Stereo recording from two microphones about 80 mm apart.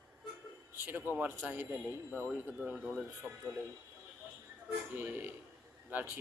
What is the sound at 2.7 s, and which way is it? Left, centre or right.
Speech, centre.